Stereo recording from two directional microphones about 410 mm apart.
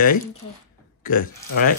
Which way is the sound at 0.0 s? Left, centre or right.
Centre.